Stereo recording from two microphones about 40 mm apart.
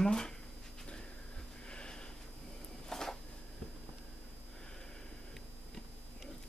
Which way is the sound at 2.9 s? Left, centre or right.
Centre.